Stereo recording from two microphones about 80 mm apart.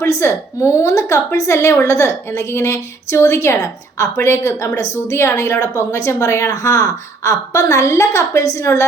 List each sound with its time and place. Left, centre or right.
0.0 s a woman's voice: left